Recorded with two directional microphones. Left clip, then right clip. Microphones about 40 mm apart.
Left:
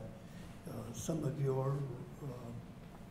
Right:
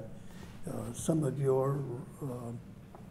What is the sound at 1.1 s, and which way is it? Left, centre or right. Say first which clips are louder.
Speech: right 8 dB; right.